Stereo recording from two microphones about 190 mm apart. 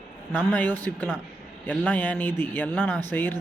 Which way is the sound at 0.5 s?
10° left (ahead or behind).